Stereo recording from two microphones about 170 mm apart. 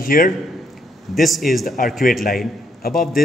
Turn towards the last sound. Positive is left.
turn(degrees=60)  # may be behind; listen again after turning